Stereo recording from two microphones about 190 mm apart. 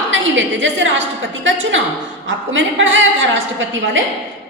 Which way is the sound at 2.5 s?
85° right.